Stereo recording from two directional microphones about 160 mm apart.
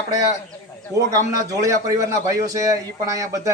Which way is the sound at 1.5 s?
20° right (ahead or behind).